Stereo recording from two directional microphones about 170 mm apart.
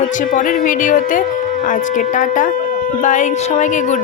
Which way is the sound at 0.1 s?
50° left (ahead or behind).